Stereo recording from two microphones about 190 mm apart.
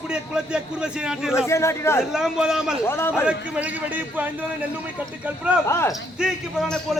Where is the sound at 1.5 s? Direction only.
15° left (ahead or behind).